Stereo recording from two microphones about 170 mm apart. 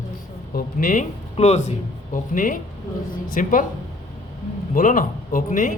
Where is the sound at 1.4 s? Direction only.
40° left (ahead or behind).